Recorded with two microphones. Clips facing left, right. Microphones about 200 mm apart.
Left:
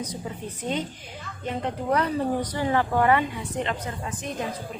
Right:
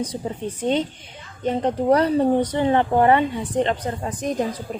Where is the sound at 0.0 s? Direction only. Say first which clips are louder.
Right 6 dB; 30° right (ahead or behind).